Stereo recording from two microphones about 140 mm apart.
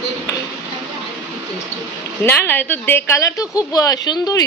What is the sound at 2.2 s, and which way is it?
Speech, 15° left (ahead or behind).